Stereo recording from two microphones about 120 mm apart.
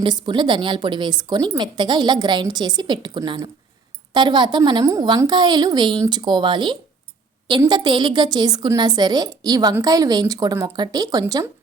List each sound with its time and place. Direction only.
0.0 s a woman's voice: 40° right (ahead or behind)